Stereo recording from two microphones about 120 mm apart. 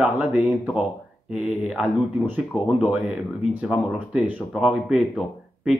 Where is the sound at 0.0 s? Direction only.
10° right (ahead or behind).